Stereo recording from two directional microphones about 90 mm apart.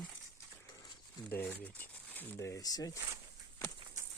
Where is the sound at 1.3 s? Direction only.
20° left (ahead or behind).